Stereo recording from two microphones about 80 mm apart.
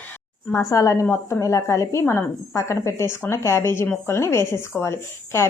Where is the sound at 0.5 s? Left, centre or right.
Left.